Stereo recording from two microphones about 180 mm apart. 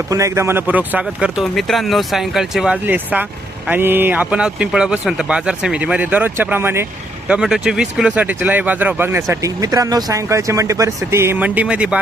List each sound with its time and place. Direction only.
0.1 s speech: 15° right (ahead or behind)